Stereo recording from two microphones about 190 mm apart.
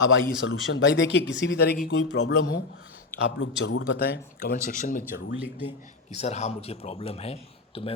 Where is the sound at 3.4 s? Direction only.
70° left (ahead or behind).